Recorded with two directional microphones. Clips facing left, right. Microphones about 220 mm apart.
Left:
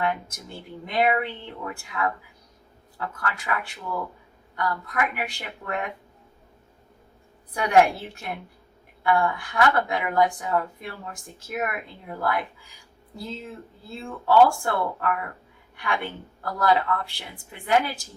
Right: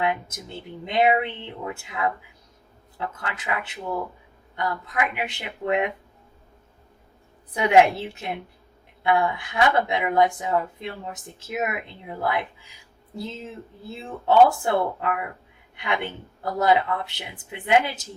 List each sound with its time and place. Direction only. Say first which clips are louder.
0.0 s speech: right 2 dB; 20° right (ahead or behind)
3.2 s speech: left 2 dB; 20° right (ahead or behind)
7.5 s speech: right 2 dB; 20° right (ahead or behind)
13.9 s speech: right 1 dB; 20° right (ahead or behind)